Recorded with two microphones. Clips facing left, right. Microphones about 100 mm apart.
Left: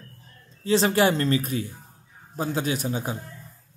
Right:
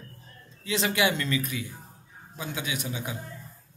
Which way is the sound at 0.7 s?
35° left (ahead or behind).